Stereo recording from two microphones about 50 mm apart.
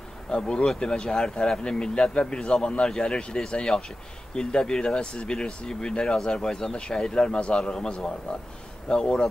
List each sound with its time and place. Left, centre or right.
0.3 s speech: centre